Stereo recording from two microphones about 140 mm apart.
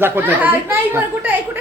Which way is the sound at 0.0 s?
15° right (ahead or behind).